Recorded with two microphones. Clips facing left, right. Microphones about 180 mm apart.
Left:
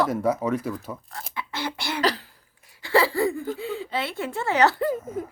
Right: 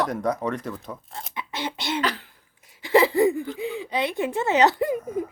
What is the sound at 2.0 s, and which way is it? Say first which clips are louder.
Speech: left 3 dB; 35° left (ahead or behind).